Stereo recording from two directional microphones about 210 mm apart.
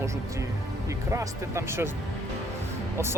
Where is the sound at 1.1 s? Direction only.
15° right (ahead or behind).